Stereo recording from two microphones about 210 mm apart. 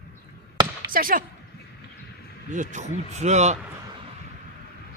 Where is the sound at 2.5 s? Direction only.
35° right (ahead or behind).